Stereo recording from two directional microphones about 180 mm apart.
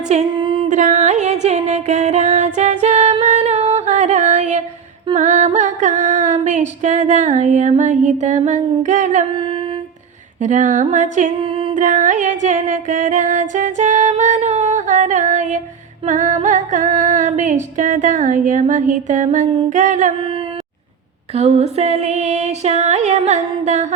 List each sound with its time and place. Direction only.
0.1 s singing: 30° right (ahead or behind)
0.7 s music: 45° right (ahead or behind)
2.8 s singing: 40° right (ahead or behind)
5.1 s music: 40° right (ahead or behind)
9.3 s music: 30° right (ahead or behind)
10.4 s music: 45° right (ahead or behind)
11.4 s a sound: 30° right (ahead or behind)
11.7 s music: 45° right (ahead or behind)
20.1 s a sound: 25° right (ahead or behind)
21.3 s female singing: 35° right (ahead or behind)